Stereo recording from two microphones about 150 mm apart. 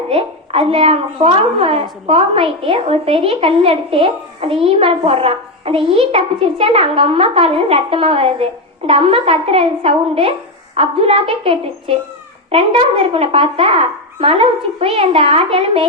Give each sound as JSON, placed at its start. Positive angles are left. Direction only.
{"t": 0.1, "sound": "a woman's voice", "side_deg": -40}